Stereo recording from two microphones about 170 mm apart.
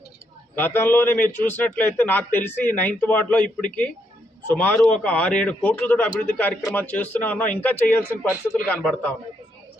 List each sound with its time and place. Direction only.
0.5 s a man's voice: 10° left (ahead or behind)